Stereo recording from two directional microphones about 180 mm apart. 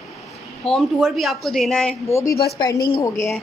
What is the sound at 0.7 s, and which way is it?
A woman's voice, centre (ahead or behind).